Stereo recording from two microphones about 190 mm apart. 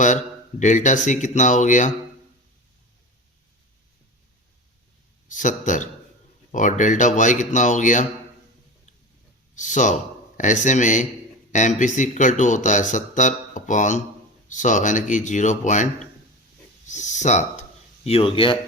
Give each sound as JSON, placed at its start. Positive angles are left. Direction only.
{"t": 0.6, "sound": "speech", "side_deg": 40}
{"t": 5.3, "sound": "speech", "side_deg": 40}
{"t": 9.6, "sound": "speech", "side_deg": 40}